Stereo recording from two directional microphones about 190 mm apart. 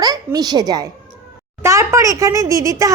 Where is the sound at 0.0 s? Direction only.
20° right (ahead or behind).